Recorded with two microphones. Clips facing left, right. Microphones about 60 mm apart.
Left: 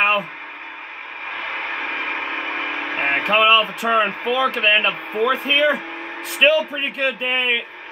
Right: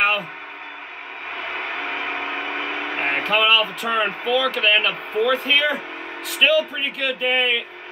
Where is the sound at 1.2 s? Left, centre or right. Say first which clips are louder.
Left 1 dB; left.